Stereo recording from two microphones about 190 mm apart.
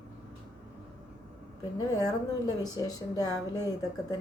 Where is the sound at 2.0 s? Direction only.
20° left (ahead or behind).